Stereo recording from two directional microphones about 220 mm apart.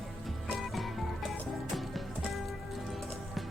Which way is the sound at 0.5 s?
Centre (ahead or behind).